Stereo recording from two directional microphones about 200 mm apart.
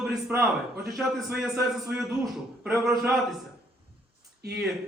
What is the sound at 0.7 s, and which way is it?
Speech, 50° right (ahead or behind).